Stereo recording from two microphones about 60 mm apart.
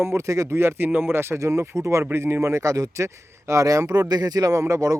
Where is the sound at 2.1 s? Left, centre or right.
Right.